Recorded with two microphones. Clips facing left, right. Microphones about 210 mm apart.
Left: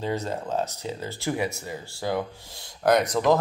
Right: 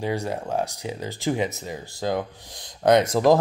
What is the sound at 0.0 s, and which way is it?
Speech, 15° right (ahead or behind).